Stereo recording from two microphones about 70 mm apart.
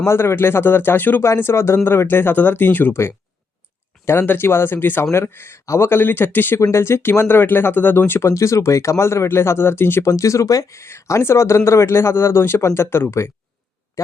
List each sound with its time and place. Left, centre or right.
0.0 s speech: left
1.2 s speech: left
6.6 s speech: left
8.3 s speech: left
10.1 s speech: left